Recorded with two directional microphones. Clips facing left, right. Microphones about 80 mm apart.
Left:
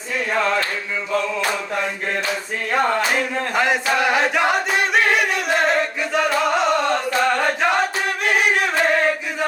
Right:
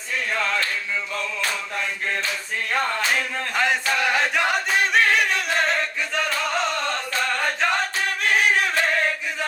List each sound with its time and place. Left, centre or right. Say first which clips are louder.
0.3 s chant: left 5 dB; left
2.7 s music: left 5 dB; centre
3.5 s chant: left 3 dB; centre
6.4 s singing: left 6 dB; centre
7.2 s chant: left 4 dB; left
8.2 s music: left 1 dB; centre